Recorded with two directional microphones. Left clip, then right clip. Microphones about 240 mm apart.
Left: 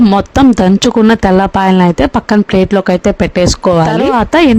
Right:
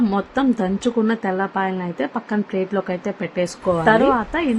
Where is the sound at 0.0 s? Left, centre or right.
Left.